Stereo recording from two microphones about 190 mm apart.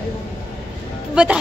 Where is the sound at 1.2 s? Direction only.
5° right (ahead or behind).